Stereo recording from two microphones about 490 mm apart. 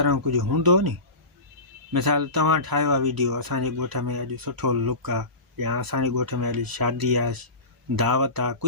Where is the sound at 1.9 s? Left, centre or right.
Right.